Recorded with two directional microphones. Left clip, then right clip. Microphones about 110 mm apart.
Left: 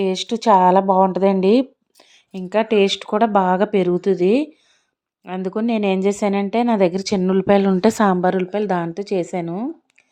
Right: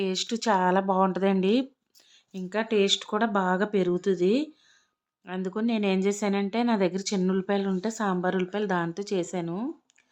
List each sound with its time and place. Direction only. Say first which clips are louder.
0.0 s a woman's voice: left 9 dB; 30° left (ahead or behind)
2.0 s a woman's voice: left 8 dB; 55° left (ahead or behind)
7.4 s a woman's voice: left 13 dB; 70° left (ahead or behind)
8.3 s a woman's voice: left 8 dB; 30° left (ahead or behind)